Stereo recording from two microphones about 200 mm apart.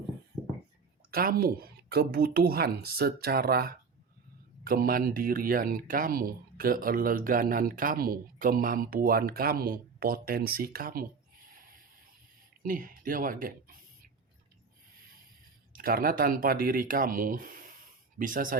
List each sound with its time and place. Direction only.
1.1 s speech: 50° right (ahead or behind)
12.6 s a sound: 45° right (ahead or behind)
15.7 s speech: 45° right (ahead or behind)